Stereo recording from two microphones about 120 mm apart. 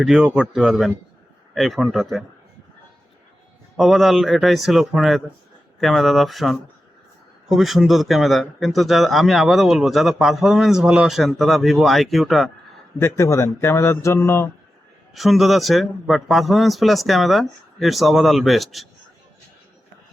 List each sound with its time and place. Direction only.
0.0 s speech: 5° right (ahead or behind)
3.8 s speech: centre (ahead or behind)
13.0 s speech: 20° left (ahead or behind)
15.1 s speech: centre (ahead or behind)